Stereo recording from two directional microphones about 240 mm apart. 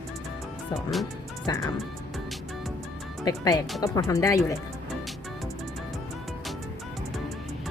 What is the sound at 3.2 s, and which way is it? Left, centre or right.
Speech, centre.